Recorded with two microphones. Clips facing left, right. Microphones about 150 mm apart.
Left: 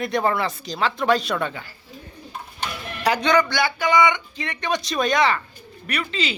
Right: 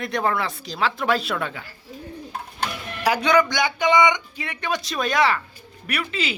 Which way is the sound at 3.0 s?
10° right (ahead or behind).